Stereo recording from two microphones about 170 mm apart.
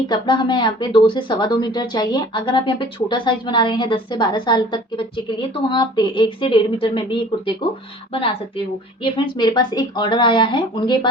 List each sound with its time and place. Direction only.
0.1 s speech: 25° left (ahead or behind)